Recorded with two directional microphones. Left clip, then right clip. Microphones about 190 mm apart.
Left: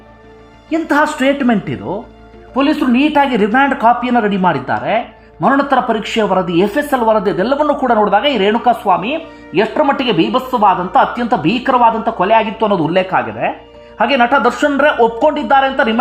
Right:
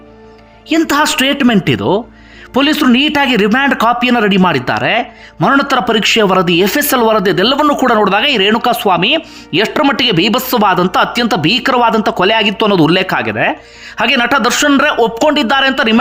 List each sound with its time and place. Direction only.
0.7 s a man's voice: 25° right (ahead or behind)